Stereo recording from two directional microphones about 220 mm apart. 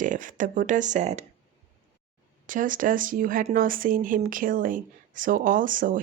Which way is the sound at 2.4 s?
35° right (ahead or behind).